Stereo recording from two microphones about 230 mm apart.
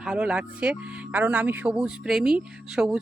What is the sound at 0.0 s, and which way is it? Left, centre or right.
Speech, centre.